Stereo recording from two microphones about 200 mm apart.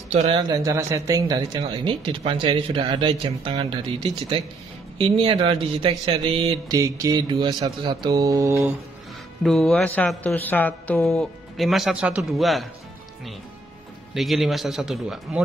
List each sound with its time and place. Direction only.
0.1 s speech: 35° right (ahead or behind)
0.4 s speech: 15° right (ahead or behind)
6.8 s mantra: 15° right (ahead or behind)
9.4 s speech: centre (ahead or behind)
14.1 s speech: centre (ahead or behind)